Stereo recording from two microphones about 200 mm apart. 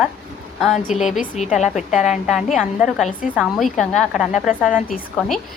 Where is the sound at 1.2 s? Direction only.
35° left (ahead or behind).